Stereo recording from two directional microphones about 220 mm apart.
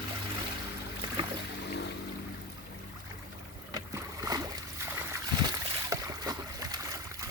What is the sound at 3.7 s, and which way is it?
Boat, 15° right (ahead or behind).